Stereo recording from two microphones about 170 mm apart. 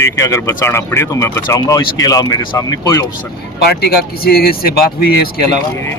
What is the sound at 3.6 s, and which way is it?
Speech, 65° left (ahead or behind).